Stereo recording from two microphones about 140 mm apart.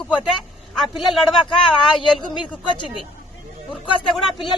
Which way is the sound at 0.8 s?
Centre (ahead or behind).